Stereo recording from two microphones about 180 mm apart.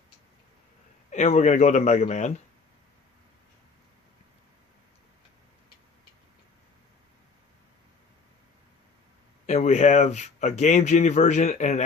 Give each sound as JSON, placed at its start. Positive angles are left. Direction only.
{"t": 1.1, "sound": "speech", "side_deg": 40}
{"t": 9.5, "sound": "speech", "side_deg": 40}